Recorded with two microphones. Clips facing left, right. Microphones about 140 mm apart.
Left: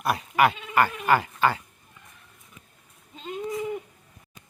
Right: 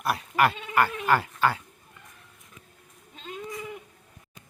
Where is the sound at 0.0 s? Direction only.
Centre (ahead or behind).